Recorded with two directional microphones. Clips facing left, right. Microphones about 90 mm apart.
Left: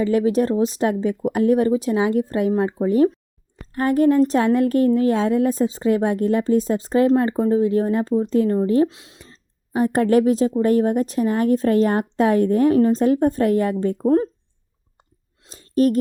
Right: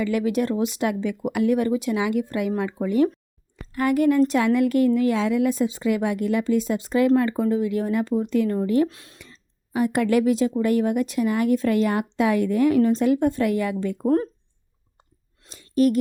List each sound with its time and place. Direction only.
0.0 s speech: 35° left (ahead or behind)
8.9 s speech: 20° left (ahead or behind)
9.2 s speech: 35° left (ahead or behind)
15.4 s a sound: 35° left (ahead or behind)